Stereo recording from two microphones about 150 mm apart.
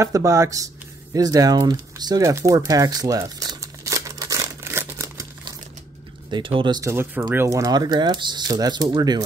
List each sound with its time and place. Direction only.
0.0 s speech: 20° right (ahead or behind)
1.1 s a sound: 25° right (ahead or behind)
6.3 s speech: 35° right (ahead or behind)